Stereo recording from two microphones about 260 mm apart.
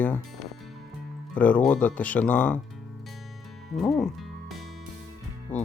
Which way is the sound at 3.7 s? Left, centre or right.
Centre.